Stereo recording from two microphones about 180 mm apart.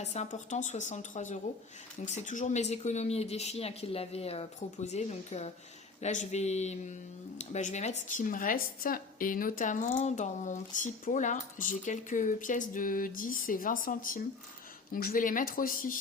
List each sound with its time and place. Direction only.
0.0 s a woman's voice: 40° left (ahead or behind)